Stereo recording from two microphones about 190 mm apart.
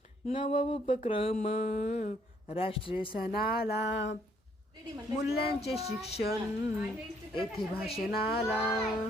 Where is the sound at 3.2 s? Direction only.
55° left (ahead or behind).